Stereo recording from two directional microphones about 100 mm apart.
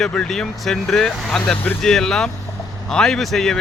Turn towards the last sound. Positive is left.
turn(degrees=5)  # may be behind; listen again after turning